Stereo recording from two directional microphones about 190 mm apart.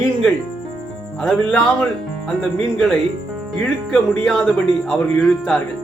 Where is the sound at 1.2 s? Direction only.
Centre (ahead or behind).